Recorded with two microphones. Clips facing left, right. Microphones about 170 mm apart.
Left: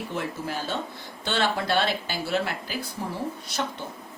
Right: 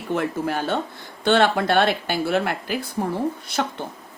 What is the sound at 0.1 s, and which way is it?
Speech, 60° right (ahead or behind).